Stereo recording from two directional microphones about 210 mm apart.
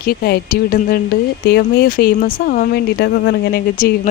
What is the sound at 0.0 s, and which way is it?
Speech, 45° left (ahead or behind).